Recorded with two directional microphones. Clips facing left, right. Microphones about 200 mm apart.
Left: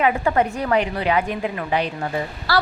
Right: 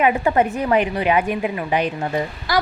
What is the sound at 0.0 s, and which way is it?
A woman's voice, 20° right (ahead or behind).